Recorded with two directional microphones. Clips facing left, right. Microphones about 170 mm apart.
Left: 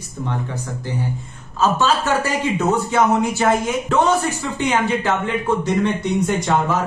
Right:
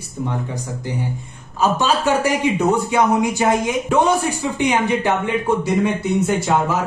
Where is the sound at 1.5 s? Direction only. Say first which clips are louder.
Even; 15° right (ahead or behind).